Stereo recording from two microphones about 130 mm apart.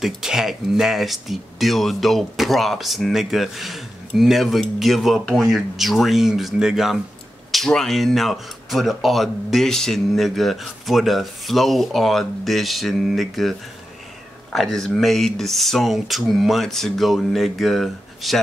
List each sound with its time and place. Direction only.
0.0 s speech: 5° right (ahead or behind)